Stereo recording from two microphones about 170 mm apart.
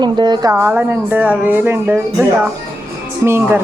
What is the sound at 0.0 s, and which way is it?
Speech, 25° right (ahead or behind).